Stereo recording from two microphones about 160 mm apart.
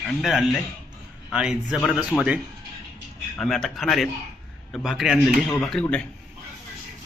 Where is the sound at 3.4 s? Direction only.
Centre (ahead or behind).